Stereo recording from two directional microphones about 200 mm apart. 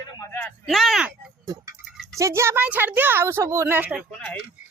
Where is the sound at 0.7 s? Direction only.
Centre (ahead or behind).